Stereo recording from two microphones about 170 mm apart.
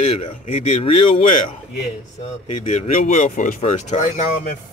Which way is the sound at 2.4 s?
35° left (ahead or behind).